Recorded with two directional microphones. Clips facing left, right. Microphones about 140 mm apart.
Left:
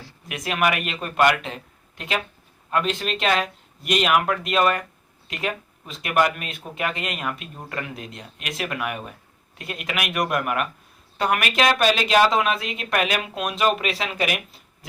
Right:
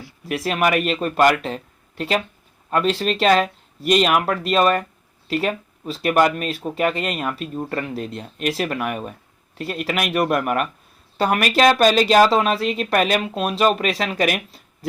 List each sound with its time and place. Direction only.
0.3 s speech: 40° right (ahead or behind)